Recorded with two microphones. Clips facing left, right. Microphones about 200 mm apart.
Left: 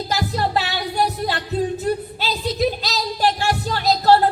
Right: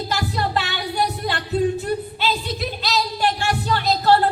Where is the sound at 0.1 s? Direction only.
40° left (ahead or behind).